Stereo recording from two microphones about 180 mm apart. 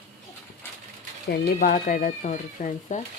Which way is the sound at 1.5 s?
45° left (ahead or behind).